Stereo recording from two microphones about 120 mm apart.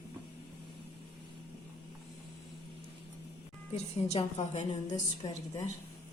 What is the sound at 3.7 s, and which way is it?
Speech, 60° left (ahead or behind).